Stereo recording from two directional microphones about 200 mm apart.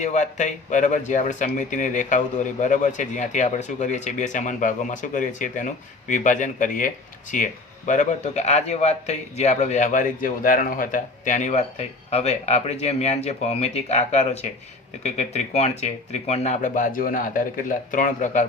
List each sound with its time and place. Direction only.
0.0 s speech: 35° left (ahead or behind)